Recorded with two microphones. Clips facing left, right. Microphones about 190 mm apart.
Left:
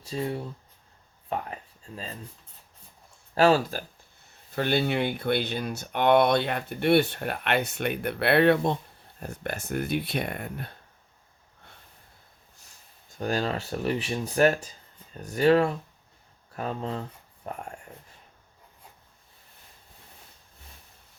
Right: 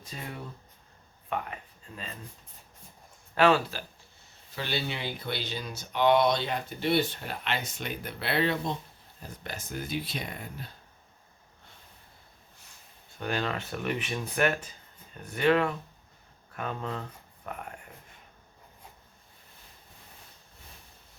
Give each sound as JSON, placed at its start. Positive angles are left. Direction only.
{"t": 0.0, "sound": "speech", "side_deg": 30}
{"t": 3.3, "sound": "speech", "side_deg": 35}
{"t": 4.5, "sound": "speech", "side_deg": 55}
{"t": 13.1, "sound": "speech", "side_deg": 40}